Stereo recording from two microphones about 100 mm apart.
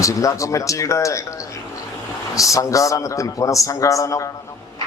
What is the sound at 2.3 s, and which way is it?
A man's voice, 35° left (ahead or behind).